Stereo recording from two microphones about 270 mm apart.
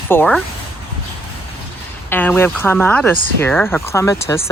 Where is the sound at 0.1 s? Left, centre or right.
Centre.